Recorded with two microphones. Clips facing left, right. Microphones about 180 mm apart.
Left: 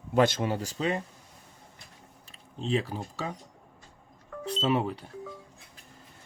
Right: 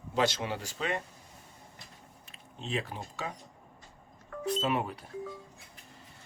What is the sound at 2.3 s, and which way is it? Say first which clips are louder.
Speech: left 7 dB; 35° left (ahead or behind).